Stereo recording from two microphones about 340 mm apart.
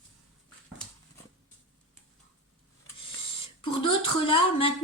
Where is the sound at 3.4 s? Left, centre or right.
Centre.